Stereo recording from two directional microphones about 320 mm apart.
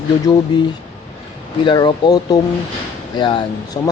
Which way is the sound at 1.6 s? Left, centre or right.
Centre.